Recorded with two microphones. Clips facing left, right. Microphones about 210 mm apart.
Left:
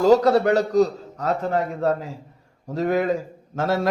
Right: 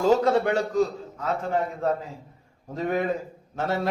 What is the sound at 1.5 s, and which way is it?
Speech, 75° left (ahead or behind).